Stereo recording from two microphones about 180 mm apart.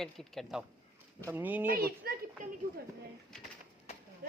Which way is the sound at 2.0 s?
60° right (ahead or behind).